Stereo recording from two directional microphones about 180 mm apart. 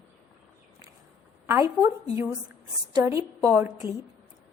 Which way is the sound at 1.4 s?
15° right (ahead or behind).